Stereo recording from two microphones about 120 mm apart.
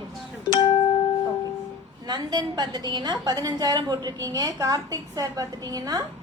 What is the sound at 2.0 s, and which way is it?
A woman's voice, 35° right (ahead or behind).